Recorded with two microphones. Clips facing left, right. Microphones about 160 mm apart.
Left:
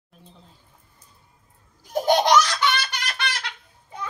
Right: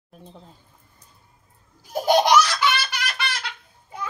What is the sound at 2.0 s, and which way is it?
Laughter, 10° right (ahead or behind).